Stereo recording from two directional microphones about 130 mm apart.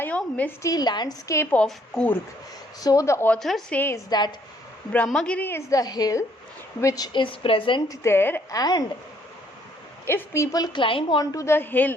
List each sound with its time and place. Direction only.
0.0 s a sound: 10° left (ahead or behind)
0.6 s a woman's voice: 30° left (ahead or behind)
1.5 s a woman's voice: 10° left (ahead or behind)
2.8 s a woman's voice: 25° left (ahead or behind)
3.2 s a woman's voice: 5° left (ahead or behind)
3.8 s a woman's voice: 20° left (ahead or behind)
4.1 s a woman's voice: 35° left (ahead or behind)
5.0 s a woman's voice: 5° left (ahead or behind); by 7.8 s 45° left (ahead or behind)
7.9 s a woman's voice: 20° left (ahead or behind)
8.5 s a woman's voice: 30° left (ahead or behind)
10.1 s a woman's voice: 20° left (ahead or behind); by 11.3 s 40° left (ahead or behind)
11.3 s a woman's voice: 25° left (ahead or behind)